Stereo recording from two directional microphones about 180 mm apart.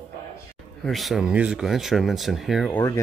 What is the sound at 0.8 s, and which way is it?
Speech, centre (ahead or behind).